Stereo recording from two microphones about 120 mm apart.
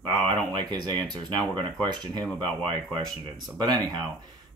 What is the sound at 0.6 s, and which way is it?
Speech, 40° right (ahead or behind).